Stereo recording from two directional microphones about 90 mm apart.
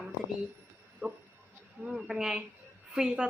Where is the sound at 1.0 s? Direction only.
20° right (ahead or behind).